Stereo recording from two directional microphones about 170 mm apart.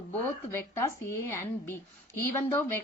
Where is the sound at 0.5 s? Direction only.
15° left (ahead or behind).